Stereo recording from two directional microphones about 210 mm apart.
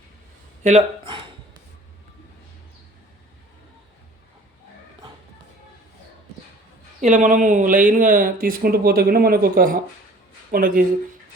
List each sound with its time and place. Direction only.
0.6 s speech: 30° right (ahead or behind)
7.0 s speech: 35° right (ahead or behind)